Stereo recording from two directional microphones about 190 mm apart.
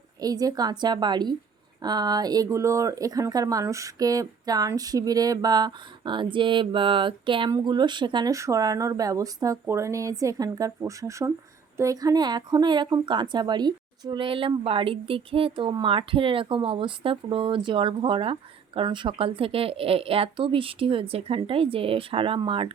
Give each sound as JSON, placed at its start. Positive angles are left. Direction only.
{"t": 0.2, "sound": "speech", "side_deg": -20}